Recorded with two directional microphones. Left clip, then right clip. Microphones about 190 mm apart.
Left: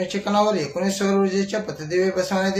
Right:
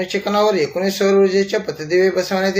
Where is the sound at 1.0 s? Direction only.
5° right (ahead or behind).